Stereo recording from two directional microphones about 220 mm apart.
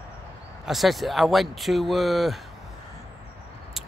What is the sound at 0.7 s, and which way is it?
Speech, centre (ahead or behind).